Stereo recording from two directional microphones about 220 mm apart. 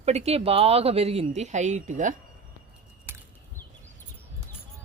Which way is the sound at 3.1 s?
10° right (ahead or behind).